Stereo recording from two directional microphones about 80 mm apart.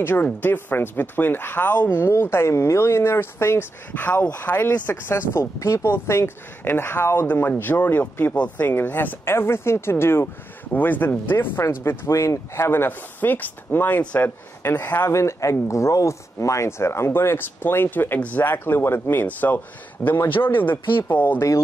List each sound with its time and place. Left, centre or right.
0.0 s speech: left
3.9 s speech: left
15.0 s speech: left